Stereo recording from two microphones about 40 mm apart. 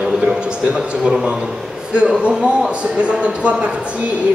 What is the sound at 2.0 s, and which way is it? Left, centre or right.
Speech, right.